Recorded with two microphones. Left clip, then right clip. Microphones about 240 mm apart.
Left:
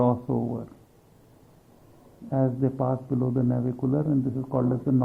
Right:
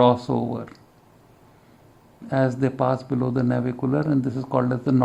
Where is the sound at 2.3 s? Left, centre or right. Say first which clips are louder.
Right 4 dB; right.